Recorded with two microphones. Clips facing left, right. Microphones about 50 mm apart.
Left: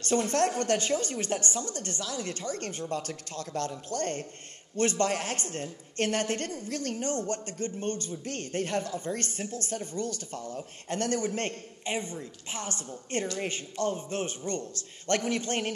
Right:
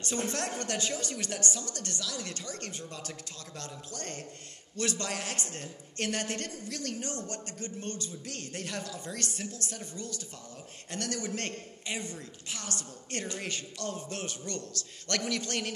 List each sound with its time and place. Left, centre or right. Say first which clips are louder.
0.3 s a woman's voice: left 8 dB; left
11.0 s a man's voice: left 5 dB; left